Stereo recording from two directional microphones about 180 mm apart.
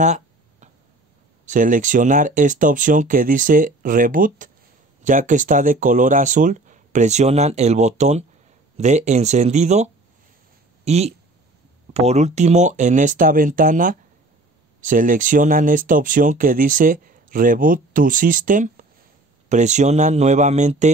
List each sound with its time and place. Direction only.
0.0 s a sound: 40° right (ahead or behind)
1.4 s speech: 45° right (ahead or behind)
10.9 s speech: 35° right (ahead or behind)